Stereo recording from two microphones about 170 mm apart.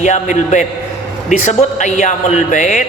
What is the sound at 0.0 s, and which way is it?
A man's voice, 45° left (ahead or behind).